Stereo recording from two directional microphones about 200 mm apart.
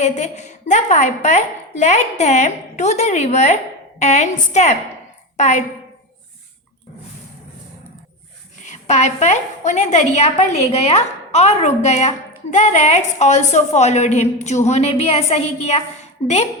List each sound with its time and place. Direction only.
0.0 s a woman's voice: 35° left (ahead or behind)
8.6 s a woman's voice: 35° left (ahead or behind)